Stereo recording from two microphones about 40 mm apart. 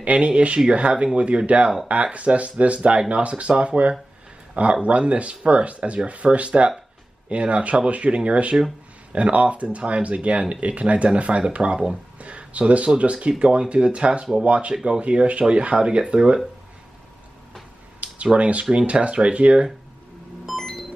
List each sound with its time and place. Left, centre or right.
0.0 s speech: right
18.0 s speech: right
20.4 s a sound: centre